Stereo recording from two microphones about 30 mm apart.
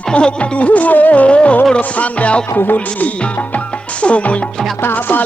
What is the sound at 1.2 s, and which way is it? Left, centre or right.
Speech, left.